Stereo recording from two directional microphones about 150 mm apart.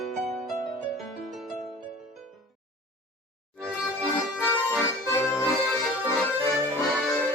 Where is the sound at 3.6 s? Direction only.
5° right (ahead or behind).